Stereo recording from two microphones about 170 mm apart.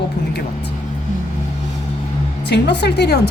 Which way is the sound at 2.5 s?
80° left.